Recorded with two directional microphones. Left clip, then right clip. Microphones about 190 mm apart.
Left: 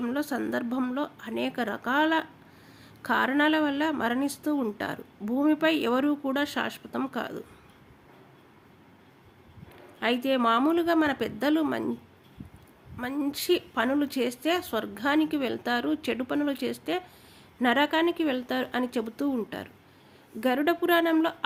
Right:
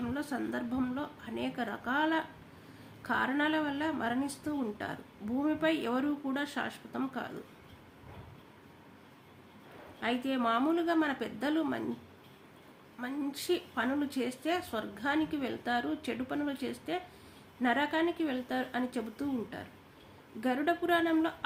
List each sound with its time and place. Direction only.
0.0 s speech: 45° left (ahead or behind)
10.0 s speech: 50° left (ahead or behind)
13.0 s speech: 45° left (ahead or behind)